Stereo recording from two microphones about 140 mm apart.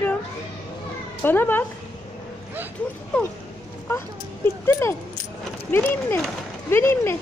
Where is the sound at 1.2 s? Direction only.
15° left (ahead or behind).